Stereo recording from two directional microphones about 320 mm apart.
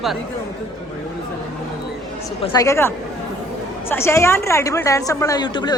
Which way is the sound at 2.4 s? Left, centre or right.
Centre.